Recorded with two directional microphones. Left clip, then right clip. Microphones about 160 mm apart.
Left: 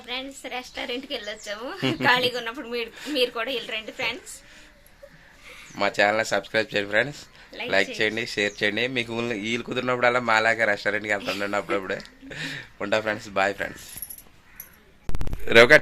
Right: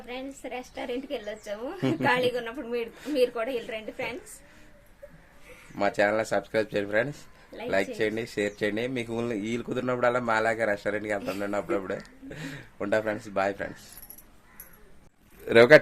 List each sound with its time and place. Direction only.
0.1 s a woman's voice: 15° right (ahead or behind)
1.8 s speech: centre (ahead or behind)
2.0 s a woman's voice: 10° right (ahead or behind)
2.9 s speech: centre (ahead or behind)
3.2 s a woman's voice: 15° right (ahead or behind)
5.7 s speech: centre (ahead or behind)
7.5 s speech: 20° right (ahead or behind)
7.9 s speech: 5° left (ahead or behind)
15.4 s speech: 5° right (ahead or behind)